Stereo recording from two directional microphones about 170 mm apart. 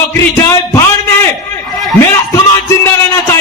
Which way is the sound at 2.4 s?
15° left (ahead or behind).